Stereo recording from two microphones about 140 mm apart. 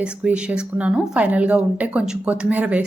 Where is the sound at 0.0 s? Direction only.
5° right (ahead or behind).